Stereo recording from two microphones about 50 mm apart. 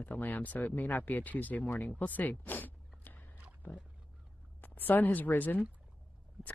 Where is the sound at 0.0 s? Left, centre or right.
Left.